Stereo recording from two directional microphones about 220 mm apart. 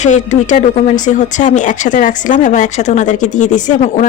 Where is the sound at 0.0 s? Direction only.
35° left (ahead or behind).